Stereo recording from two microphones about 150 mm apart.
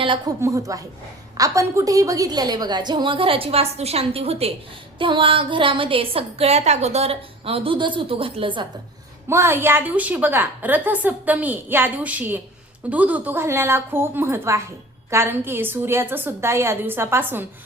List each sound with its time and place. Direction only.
0.4 s a woman's voice: 20° right (ahead or behind)
9.3 s a woman's voice: 15° right (ahead or behind)